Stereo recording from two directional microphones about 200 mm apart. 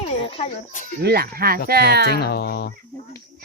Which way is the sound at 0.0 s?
30° left (ahead or behind).